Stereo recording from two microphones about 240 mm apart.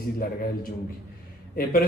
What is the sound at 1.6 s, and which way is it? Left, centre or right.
Speech, left.